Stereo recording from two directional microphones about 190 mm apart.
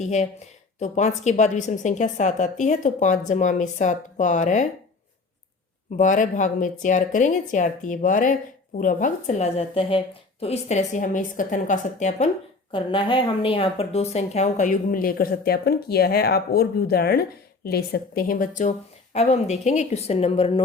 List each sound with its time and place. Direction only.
0.0 s a woman's voice: 35° left (ahead or behind)
6.0 s a woman's voice: 40° left (ahead or behind)
12.7 s a woman's voice: 25° left (ahead or behind)